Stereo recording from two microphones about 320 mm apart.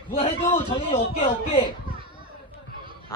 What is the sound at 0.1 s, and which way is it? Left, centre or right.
Speech, centre.